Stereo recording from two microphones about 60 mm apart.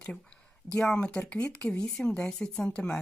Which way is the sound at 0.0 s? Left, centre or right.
Centre.